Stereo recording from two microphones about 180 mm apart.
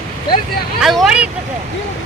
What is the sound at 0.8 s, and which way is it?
Speech, centre (ahead or behind).